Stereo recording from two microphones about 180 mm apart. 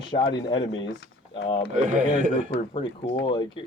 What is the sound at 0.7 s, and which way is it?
Speech, 75° left (ahead or behind).